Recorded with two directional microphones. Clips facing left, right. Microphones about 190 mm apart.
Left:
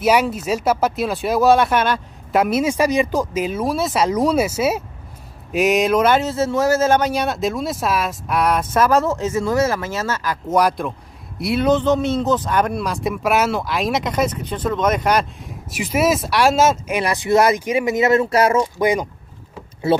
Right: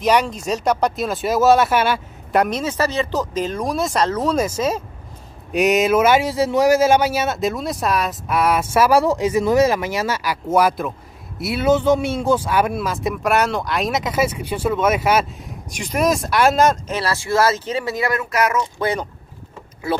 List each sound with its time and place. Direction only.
0.0 s speech: 5° left (ahead or behind)
15.7 s speech: 5° left (ahead or behind)
16.9 s speech: 15° left (ahead or behind)
18.8 s speech: 15° left (ahead or behind)
19.9 s speech: 25° left (ahead or behind)